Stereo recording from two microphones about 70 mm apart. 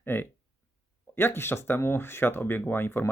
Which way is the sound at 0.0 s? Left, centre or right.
Left.